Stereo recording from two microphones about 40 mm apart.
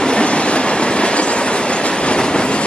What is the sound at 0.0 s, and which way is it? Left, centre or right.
Train, left.